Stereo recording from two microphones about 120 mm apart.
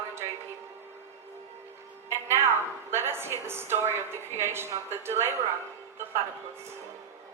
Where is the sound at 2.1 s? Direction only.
20° right (ahead or behind).